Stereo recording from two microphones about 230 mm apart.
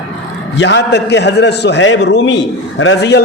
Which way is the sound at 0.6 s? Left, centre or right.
Left.